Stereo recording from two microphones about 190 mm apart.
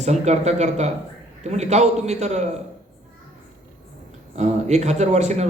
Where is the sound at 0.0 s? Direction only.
35° right (ahead or behind).